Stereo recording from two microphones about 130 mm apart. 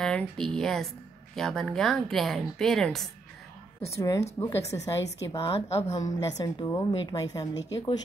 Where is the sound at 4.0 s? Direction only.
25° left (ahead or behind).